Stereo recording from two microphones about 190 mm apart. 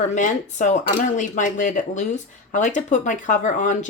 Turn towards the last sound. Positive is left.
turn(degrees=40)  # may be behind; listen again after turning